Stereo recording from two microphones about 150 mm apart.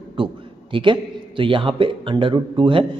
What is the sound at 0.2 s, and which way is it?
A man's voice, 35° right (ahead or behind).